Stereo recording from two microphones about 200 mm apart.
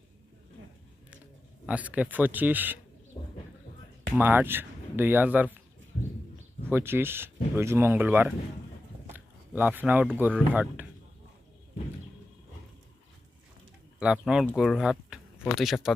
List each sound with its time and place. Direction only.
1.6 s speech: 5° right (ahead or behind)
3.2 s horse: 15° left (ahead or behind)
4.1 s speech: 10° right (ahead or behind)
6.7 s speech: 10° right (ahead or behind)
9.1 s a sound: 10° right (ahead or behind)
10.2 s speech: 10° right (ahead or behind)
14.0 s speech: 5° right (ahead or behind)